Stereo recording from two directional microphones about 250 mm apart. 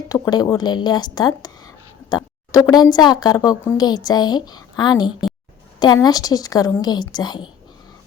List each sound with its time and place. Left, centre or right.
0.1 s speech: centre